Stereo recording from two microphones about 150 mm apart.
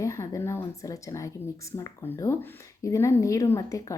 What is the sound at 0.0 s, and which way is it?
Speech, 20° left (ahead or behind).